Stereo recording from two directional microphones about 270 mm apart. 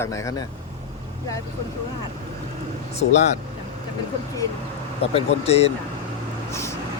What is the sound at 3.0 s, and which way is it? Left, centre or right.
Speech, left.